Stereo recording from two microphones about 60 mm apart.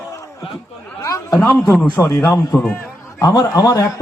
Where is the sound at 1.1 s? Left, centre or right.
Left.